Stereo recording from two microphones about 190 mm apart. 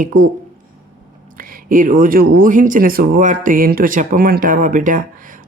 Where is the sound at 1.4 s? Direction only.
45° right (ahead or behind).